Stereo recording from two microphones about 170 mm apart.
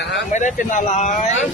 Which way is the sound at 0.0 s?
90° left.